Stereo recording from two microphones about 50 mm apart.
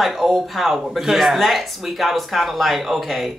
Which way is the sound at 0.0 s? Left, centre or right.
Centre.